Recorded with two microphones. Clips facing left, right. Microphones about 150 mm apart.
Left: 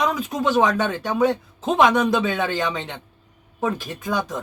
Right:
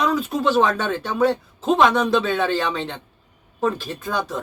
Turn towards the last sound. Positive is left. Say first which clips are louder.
# even
turn(degrees=15)  # may be behind; listen again after turning